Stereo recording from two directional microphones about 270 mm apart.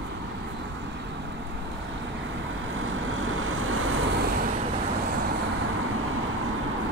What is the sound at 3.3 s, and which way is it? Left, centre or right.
Vehicle, right.